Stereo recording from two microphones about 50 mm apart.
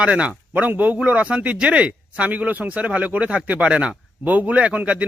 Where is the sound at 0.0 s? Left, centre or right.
Right.